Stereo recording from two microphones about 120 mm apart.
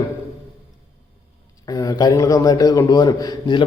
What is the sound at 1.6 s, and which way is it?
A man's voice, 30° left (ahead or behind).